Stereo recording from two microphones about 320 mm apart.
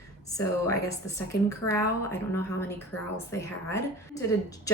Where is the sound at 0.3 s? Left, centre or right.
Centre.